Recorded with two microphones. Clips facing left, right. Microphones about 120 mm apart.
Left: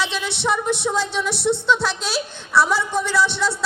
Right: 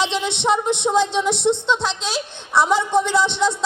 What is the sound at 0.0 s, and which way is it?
Speech, 20° right (ahead or behind).